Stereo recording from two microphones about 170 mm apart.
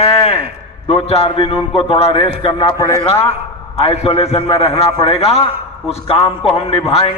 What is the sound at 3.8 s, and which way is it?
A man's voice, 35° left (ahead or behind).